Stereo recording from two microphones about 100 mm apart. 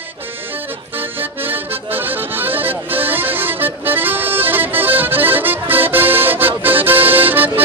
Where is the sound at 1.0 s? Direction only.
20° right (ahead or behind).